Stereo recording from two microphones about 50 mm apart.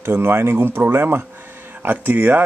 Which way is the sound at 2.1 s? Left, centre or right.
Right.